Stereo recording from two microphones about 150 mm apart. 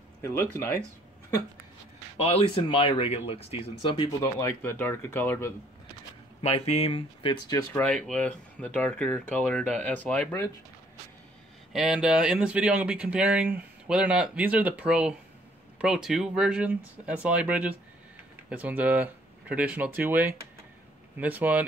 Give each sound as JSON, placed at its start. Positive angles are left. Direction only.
{"t": 0.2, "sound": "speech", "side_deg": 15}
{"t": 2.1, "sound": "speech", "side_deg": 40}
{"t": 4.2, "sound": "speech", "side_deg": 20}
{"t": 6.4, "sound": "speech", "side_deg": 45}
{"t": 7.5, "sound": "speech", "side_deg": 10}
{"t": 11.7, "sound": "speech", "side_deg": -5}